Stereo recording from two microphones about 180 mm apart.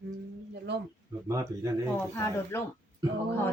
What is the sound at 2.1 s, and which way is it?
Speech, 15° left (ahead or behind).